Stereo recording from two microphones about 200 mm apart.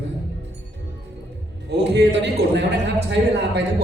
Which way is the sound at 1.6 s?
60° right (ahead or behind).